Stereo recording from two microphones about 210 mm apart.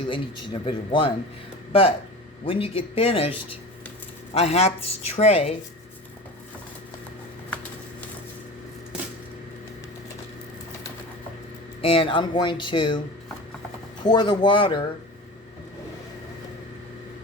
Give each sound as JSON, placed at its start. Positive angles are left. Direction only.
{"t": 0.1, "sound": "speech", "side_deg": 25}
{"t": 2.4, "sound": "speech", "side_deg": 25}
{"t": 11.8, "sound": "speech", "side_deg": 25}
{"t": 14.0, "sound": "speech", "side_deg": 20}